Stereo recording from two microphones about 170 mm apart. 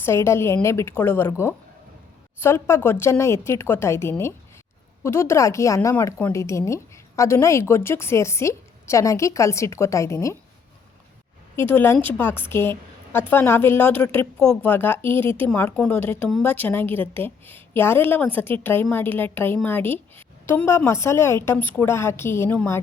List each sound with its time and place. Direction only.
0.0 s a woman's voice: 15° left (ahead or behind)
11.7 s a woman's voice: 10° left (ahead or behind)